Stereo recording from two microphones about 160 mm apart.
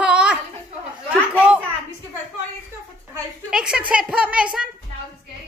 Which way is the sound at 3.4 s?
5° right (ahead or behind).